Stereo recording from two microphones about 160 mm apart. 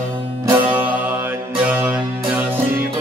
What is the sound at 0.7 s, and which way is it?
Music, 10° right (ahead or behind).